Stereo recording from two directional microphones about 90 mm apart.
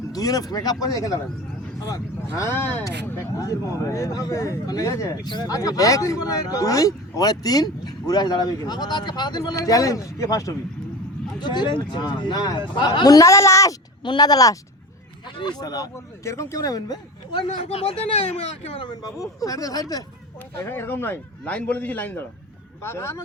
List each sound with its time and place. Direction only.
0.1 s speech: 45° left (ahead or behind); by 2.8 s 25° left (ahead or behind)
3.3 s speech: 40° left (ahead or behind)
5.2 s speech: 50° left (ahead or behind)
9.4 s speech: 40° left (ahead or behind)
11.3 s speech: 55° left (ahead or behind); by 13.7 s 35° left (ahead or behind)
14.0 s speech: 55° left (ahead or behind)
17.7 s speech: 90° left
18.9 s speech: 45° left (ahead or behind)
20.7 s a man's voice: 25° left (ahead or behind)